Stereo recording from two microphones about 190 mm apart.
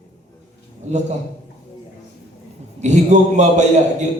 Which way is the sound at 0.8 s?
40° right (ahead or behind).